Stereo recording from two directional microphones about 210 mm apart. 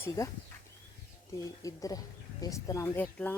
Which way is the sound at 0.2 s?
15° left (ahead or behind).